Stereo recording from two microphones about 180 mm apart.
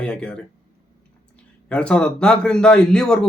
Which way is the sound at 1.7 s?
5° left (ahead or behind).